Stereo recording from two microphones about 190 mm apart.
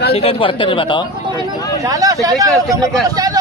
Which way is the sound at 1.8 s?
20° right (ahead or behind).